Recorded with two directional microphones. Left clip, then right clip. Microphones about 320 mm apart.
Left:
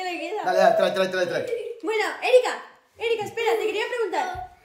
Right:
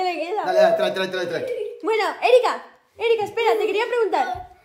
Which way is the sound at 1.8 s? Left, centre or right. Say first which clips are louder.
Right 5 dB; right.